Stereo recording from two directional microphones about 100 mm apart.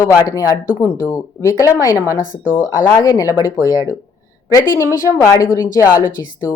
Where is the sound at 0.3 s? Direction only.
35° left (ahead or behind).